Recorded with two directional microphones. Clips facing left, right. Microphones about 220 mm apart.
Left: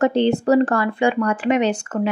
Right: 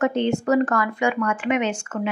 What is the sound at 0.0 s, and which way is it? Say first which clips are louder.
A woman's voice: left 4 dB; 35° left (ahead or behind).